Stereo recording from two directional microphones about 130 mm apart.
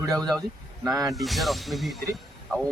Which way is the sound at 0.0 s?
5° left (ahead or behind).